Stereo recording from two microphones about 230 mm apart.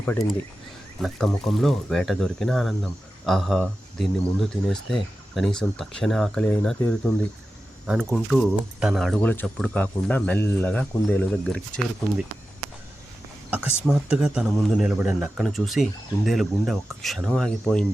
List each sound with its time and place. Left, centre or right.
0.0 s speech: centre
13.5 s a sound: centre
13.8 s speech: centre